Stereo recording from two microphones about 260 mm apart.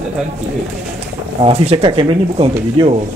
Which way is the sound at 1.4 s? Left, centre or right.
Right.